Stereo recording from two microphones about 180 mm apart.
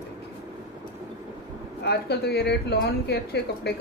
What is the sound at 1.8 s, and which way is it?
A woman's voice, 65° left (ahead or behind).